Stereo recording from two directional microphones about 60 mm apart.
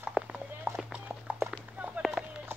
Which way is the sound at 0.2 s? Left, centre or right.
Centre.